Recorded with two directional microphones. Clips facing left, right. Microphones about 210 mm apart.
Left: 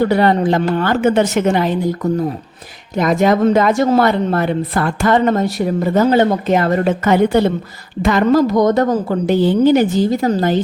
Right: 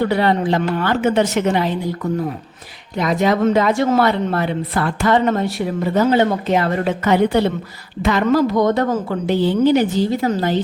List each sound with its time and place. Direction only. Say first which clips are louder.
0.0 s a woman's voice: left 4 dB; 45° left (ahead or behind)
3.0 s a woman's voice: left 3 dB; 50° left (ahead or behind)